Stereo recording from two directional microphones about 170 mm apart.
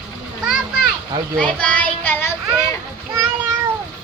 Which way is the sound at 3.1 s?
20° right (ahead or behind).